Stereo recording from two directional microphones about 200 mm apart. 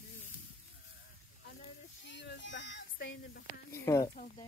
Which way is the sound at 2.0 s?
65° left (ahead or behind).